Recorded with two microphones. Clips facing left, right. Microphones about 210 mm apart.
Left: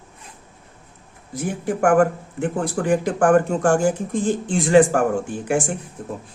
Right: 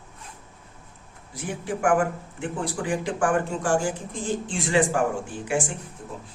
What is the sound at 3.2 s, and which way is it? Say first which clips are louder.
Speech: left 8 dB; 60° left (ahead or behind).